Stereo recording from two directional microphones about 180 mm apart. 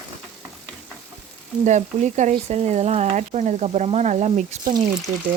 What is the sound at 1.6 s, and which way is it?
Frying, 40° right (ahead or behind).